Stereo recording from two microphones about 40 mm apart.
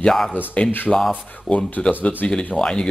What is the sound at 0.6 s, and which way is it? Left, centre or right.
A man's voice, left.